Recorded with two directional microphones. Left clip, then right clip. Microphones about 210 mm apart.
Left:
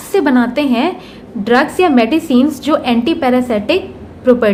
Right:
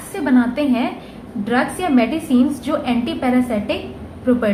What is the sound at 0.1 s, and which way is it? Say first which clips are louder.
A woman's voice: left 6 dB; 45° left (ahead or behind).